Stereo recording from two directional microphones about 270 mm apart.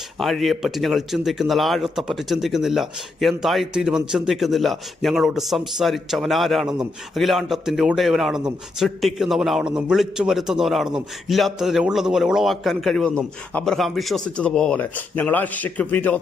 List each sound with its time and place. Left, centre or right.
0.2 s speech: centre